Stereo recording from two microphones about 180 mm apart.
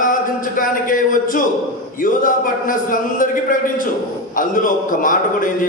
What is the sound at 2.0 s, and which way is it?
A man's voice, 50° left (ahead or behind).